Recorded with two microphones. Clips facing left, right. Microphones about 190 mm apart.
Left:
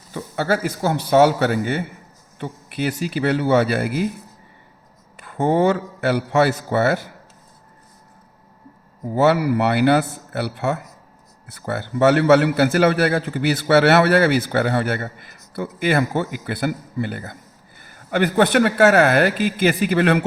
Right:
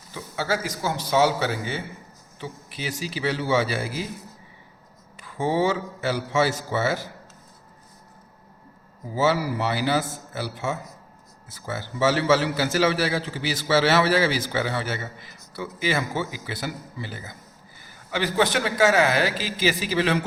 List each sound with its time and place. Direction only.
0.1 s a man's voice: 55° left (ahead or behind)
5.1 s a man's voice: 55° left (ahead or behind)
9.1 s a man's voice: 60° left (ahead or behind)